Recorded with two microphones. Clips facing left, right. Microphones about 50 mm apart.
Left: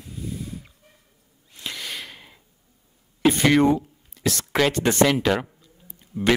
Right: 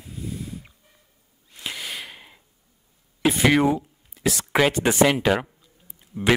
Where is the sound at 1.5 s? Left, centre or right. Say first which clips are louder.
Even; centre.